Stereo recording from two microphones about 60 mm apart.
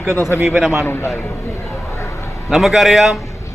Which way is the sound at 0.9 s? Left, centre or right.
Left.